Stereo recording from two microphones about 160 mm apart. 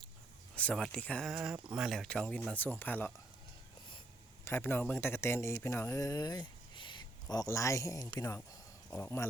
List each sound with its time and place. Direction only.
0.5 s speech: 5° left (ahead or behind)
4.4 s speech: 15° left (ahead or behind)